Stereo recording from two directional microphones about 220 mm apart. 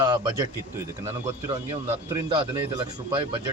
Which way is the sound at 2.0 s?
20° right (ahead or behind).